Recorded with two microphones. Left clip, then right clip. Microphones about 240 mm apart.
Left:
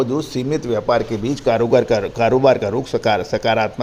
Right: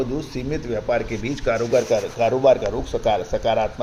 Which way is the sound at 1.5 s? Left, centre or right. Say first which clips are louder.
Left 4 dB; left.